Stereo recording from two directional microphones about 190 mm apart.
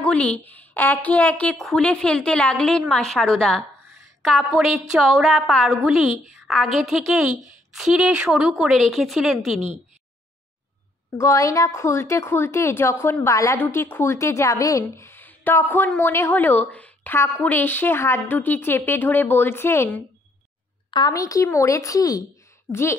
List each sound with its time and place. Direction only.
0.0 s a woman's voice: 5° left (ahead or behind)
11.1 s a woman's voice: 15° left (ahead or behind)